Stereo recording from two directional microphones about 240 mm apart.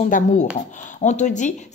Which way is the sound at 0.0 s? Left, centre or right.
Left.